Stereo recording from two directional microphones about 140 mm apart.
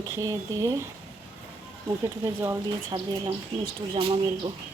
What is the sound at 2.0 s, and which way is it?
Speech, 20° right (ahead or behind).